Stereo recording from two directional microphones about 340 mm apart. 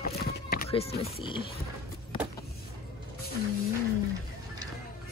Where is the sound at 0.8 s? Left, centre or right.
Left.